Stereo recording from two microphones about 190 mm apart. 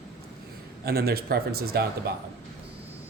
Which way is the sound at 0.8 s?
55° right (ahead or behind).